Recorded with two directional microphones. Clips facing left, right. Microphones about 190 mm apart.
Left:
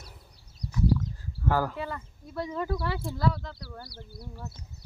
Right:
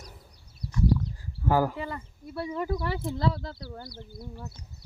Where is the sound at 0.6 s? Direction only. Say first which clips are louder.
Left 1 dB; 30° right (ahead or behind).